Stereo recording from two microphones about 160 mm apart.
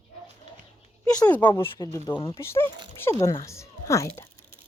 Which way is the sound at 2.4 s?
15° left (ahead or behind).